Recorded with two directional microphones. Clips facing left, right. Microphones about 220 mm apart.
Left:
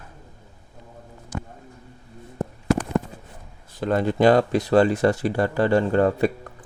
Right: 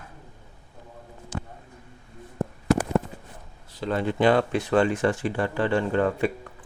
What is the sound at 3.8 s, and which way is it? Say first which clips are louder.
Speech: left 4 dB; 40° left (ahead or behind).